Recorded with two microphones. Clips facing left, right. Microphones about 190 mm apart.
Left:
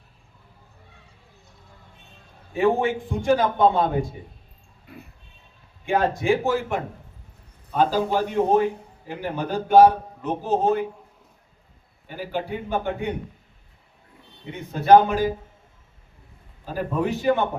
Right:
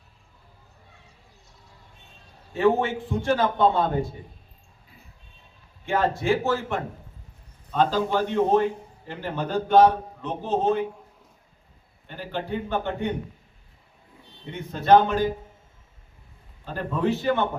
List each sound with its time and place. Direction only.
2.5 s a man's voice: 10° left (ahead or behind)
4.9 s a sound: 70° left (ahead or behind)
5.8 s a man's voice: 15° left (ahead or behind)
12.0 s a man's voice: 10° left (ahead or behind)
14.7 s a man's voice: 10° left (ahead or behind)
16.6 s a man's voice: 10° left (ahead or behind)